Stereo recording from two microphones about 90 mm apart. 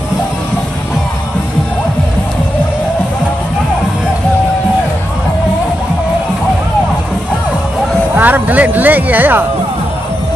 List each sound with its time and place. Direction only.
8.2 s speech: 20° right (ahead or behind)